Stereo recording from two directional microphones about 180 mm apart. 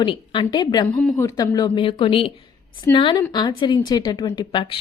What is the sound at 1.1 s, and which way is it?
A woman's voice, 20° left (ahead or behind).